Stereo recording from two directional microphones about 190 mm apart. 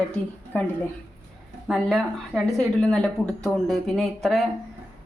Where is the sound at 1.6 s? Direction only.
Centre (ahead or behind).